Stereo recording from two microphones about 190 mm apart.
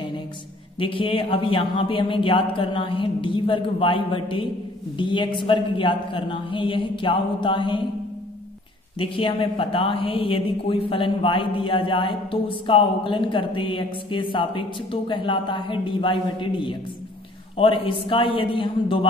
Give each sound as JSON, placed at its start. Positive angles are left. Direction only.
{"t": 0.7, "sound": "speech", "side_deg": 25}
{"t": 8.9, "sound": "speech", "side_deg": 30}